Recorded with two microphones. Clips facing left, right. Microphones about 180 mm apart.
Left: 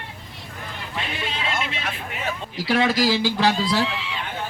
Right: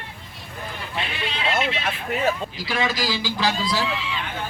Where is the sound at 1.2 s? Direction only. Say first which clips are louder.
Right 1 dB; 45° left (ahead or behind).